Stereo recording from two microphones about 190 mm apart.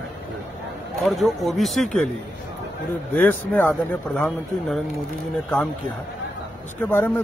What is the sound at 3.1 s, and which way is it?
Speech, 10° left (ahead or behind).